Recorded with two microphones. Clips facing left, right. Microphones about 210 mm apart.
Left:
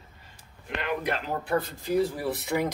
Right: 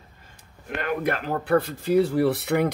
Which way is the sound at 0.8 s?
55° right (ahead or behind).